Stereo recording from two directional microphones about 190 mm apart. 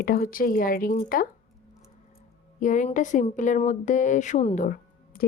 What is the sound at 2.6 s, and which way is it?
Speech, 40° left (ahead or behind).